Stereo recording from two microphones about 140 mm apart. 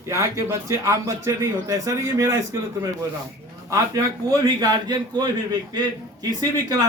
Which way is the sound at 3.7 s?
25° right (ahead or behind).